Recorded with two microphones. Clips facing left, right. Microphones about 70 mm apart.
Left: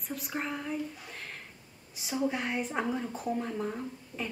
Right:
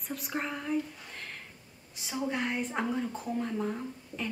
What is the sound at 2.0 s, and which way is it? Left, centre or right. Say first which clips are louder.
A woman's voice: left 1 dB; centre.